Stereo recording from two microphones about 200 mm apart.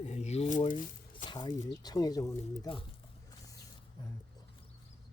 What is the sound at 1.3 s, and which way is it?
Speech, 20° left (ahead or behind).